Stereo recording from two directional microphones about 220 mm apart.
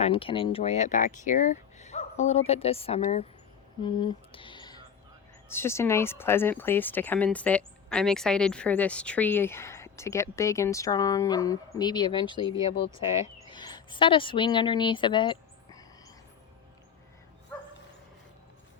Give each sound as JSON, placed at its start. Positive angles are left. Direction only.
{"t": 0.0, "sound": "speech", "side_deg": 25}
{"t": 13.5, "sound": "speech", "side_deg": 20}